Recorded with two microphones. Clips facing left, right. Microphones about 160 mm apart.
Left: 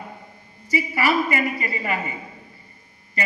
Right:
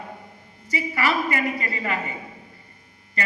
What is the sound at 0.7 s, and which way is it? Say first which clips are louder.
A man's voice: left 3 dB; 5° left (ahead or behind).